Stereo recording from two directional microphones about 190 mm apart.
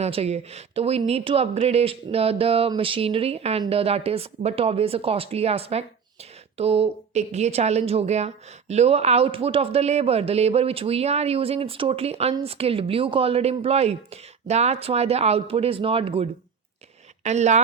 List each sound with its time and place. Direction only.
0.0 s a woman's voice: 35° right (ahead or behind)